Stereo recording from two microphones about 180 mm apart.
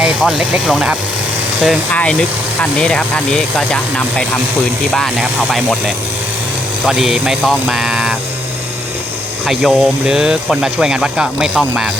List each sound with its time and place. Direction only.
0.0 s speech: 5° right (ahead or behind)
9.5 s speech: 5° left (ahead or behind)